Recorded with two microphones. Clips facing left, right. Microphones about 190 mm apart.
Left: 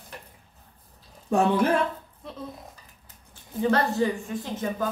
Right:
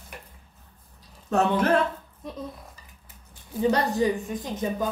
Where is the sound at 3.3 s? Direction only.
15° right (ahead or behind).